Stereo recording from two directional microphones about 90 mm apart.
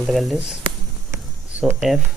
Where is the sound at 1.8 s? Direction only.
Centre (ahead or behind).